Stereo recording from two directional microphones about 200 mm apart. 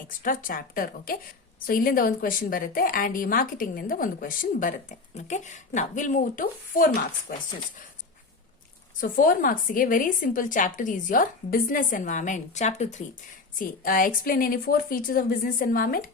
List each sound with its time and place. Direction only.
0.2 s a woman's voice: 45° left (ahead or behind)
9.0 s a woman's voice: 45° left (ahead or behind)